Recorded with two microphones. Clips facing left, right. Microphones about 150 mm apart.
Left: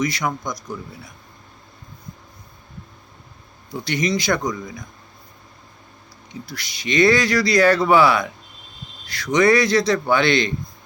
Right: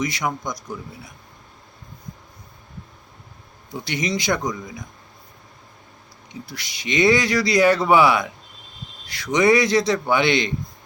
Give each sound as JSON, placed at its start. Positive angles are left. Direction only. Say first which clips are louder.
{"t": 0.0, "sound": "speech", "louder": "left 2 dB", "side_deg": -20}
{"t": 3.8, "sound": "speech", "louder": "left 2 dB", "side_deg": -20}
{"t": 6.4, "sound": "speech", "louder": "left 2 dB", "side_deg": -20}